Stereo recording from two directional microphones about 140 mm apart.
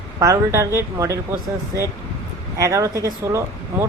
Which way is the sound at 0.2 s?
20° right (ahead or behind).